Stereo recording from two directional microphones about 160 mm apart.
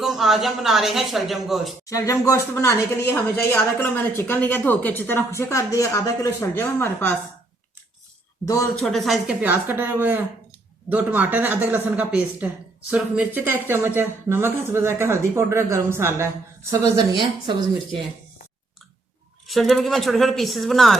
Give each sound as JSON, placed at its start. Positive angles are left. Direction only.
{"t": 0.0, "sound": "a man's voice", "side_deg": 0}
{"t": 1.9, "sound": "speech", "side_deg": 20}
{"t": 8.4, "sound": "speech", "side_deg": 20}
{"t": 8.7, "sound": "speech", "side_deg": 0}
{"t": 17.2, "sound": "a woman's voice", "side_deg": -30}
{"t": 19.5, "sound": "a man's voice", "side_deg": 0}